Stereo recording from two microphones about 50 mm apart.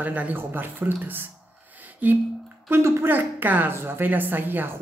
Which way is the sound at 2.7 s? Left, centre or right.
Right.